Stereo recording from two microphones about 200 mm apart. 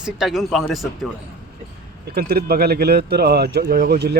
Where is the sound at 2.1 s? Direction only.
50° right (ahead or behind).